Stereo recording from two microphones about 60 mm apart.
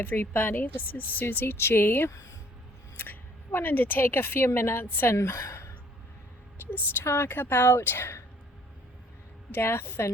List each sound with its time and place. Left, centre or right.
0.0 s a woman's voice: left
2.0 s speech: left
3.0 s a woman's voice: left
6.6 s a sound: left
7.0 s a woman's voice: left
9.5 s a woman's voice: left